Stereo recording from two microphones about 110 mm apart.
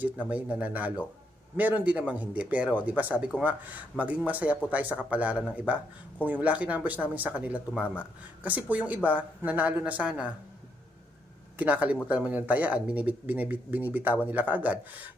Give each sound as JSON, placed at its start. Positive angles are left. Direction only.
{"t": 0.0, "sound": "speech", "side_deg": -15}
{"t": 11.5, "sound": "speech", "side_deg": -15}